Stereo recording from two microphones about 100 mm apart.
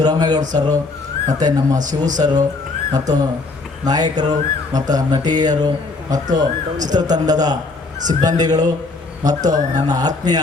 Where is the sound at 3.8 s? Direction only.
40° right (ahead or behind).